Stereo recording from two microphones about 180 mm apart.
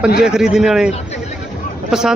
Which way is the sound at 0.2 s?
5° right (ahead or behind).